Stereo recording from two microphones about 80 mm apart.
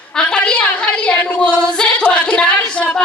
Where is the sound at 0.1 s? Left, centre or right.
Centre.